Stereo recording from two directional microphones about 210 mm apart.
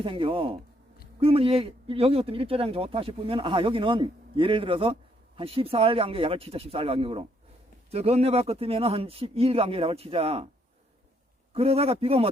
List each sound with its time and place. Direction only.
0.0 s speech: 25° right (ahead or behind)
11.5 s speech: 30° right (ahead or behind)